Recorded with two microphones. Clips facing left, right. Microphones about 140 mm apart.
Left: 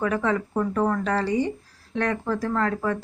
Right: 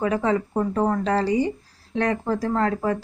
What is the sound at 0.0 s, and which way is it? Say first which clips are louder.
A woman's voice: right 2 dB; 25° right (ahead or behind).